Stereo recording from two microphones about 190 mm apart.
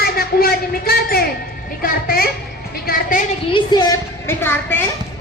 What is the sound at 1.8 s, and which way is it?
Speech, 50° left (ahead or behind).